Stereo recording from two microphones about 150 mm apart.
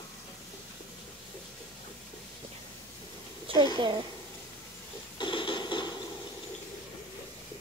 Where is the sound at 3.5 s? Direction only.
35° right (ahead or behind).